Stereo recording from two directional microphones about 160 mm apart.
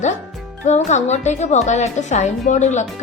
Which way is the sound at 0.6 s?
45° left (ahead or behind).